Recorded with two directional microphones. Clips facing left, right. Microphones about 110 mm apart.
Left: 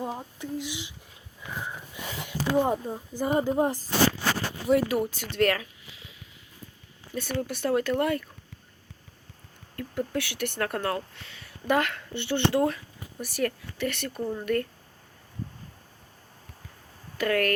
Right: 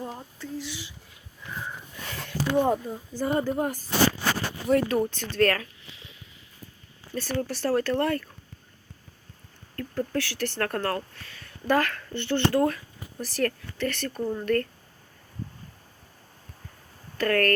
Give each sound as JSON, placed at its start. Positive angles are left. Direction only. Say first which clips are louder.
{"t": 0.0, "sound": "a sound", "louder": "left 3 dB", "side_deg": 15}
{"t": 2.0, "sound": "a sound", "louder": "right 2 dB", "side_deg": 15}
{"t": 3.2, "sound": "speech", "louder": "left 1 dB", "side_deg": 15}
{"t": 4.7, "sound": "speech", "louder": "right 1 dB", "side_deg": 10}
{"t": 7.1, "sound": "speech", "louder": "right 1 dB", "side_deg": 0}
{"t": 7.4, "sound": "speech", "louder": "even", "side_deg": 15}
{"t": 9.7, "sound": "speech", "louder": "right 1 dB", "side_deg": 10}
{"t": 14.2, "sound": "speech", "louder": "right 2 dB", "side_deg": 0}
{"t": 14.4, "sound": "speech", "louder": "right 2 dB", "side_deg": 15}
{"t": 17.2, "sound": "speech", "louder": "right 2 dB", "side_deg": 10}